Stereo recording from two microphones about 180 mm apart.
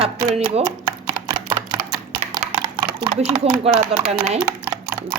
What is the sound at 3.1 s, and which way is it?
Speech, 35° right (ahead or behind).